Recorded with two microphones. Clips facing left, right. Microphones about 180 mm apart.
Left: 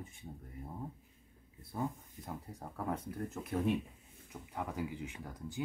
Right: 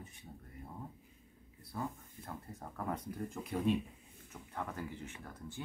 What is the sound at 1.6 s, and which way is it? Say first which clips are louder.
Speech: left 3 dB; 20° left (ahead or behind).